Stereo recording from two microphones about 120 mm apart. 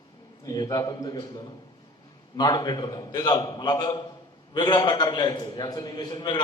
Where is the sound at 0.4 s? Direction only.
30° left (ahead or behind).